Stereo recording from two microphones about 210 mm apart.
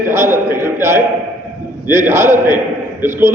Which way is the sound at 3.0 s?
10° right (ahead or behind).